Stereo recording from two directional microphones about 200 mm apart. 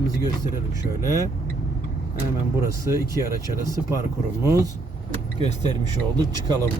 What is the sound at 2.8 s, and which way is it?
Speech, 15° right (ahead or behind).